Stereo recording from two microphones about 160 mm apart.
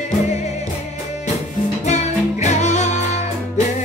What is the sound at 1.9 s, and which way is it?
Music, 45° left (ahead or behind).